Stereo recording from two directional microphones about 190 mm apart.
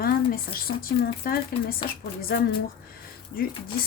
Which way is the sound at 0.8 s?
50° left (ahead or behind).